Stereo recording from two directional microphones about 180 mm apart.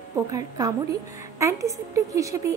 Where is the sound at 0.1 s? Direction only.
20° right (ahead or behind).